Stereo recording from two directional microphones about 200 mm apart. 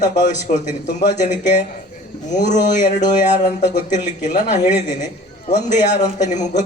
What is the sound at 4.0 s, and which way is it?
A man's voice, 35° left (ahead or behind).